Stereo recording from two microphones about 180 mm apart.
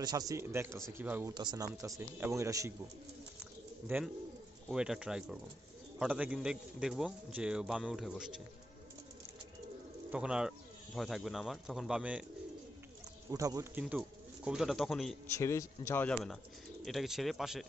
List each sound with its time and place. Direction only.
0.0 s speech: 20° right (ahead or behind)
1.3 s speech: 25° right (ahead or behind)
3.9 s a man's voice: 10° right (ahead or behind)
10.1 s a man's voice: 5° right (ahead or behind)
13.3 s a man's voice: 20° right (ahead or behind); by 15.1 s centre (ahead or behind)
15.3 s a man's voice: 15° left (ahead or behind); by 17.6 s centre (ahead or behind)